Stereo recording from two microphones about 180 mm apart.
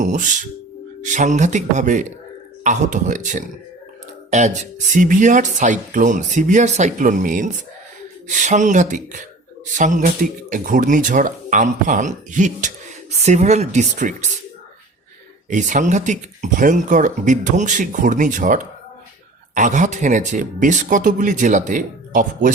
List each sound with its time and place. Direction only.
0.0 s speech: 45° right (ahead or behind)
15.4 s speech: 45° right (ahead or behind)